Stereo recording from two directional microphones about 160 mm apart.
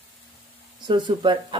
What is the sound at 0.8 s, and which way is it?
Speech, 30° right (ahead or behind).